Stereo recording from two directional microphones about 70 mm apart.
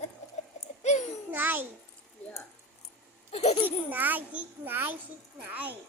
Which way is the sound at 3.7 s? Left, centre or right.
Right.